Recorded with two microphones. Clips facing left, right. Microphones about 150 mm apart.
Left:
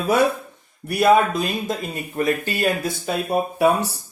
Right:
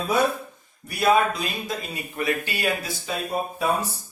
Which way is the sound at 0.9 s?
50° left (ahead or behind).